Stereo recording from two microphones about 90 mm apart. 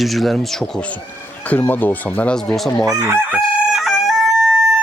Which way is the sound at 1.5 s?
20° left (ahead or behind).